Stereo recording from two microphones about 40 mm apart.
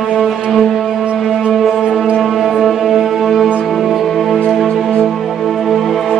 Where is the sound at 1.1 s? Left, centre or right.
Centre.